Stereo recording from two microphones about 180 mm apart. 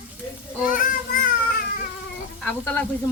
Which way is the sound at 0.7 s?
50° left (ahead or behind).